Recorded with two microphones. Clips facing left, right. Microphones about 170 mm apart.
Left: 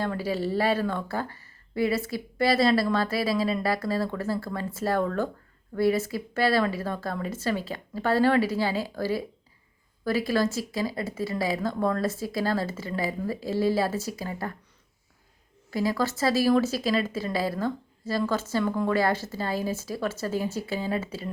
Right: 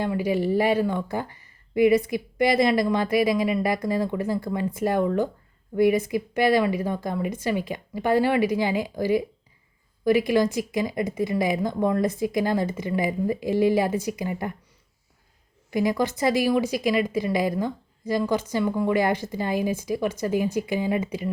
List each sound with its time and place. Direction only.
0.0 s speech: 15° right (ahead or behind)
15.7 s speech: 20° right (ahead or behind)